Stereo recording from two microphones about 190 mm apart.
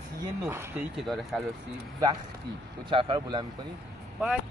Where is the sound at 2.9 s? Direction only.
25° right (ahead or behind).